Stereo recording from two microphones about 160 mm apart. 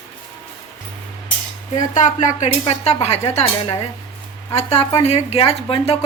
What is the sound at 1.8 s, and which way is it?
A woman's voice, 50° left (ahead or behind).